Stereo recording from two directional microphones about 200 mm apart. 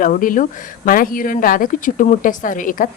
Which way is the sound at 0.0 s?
40° left (ahead or behind).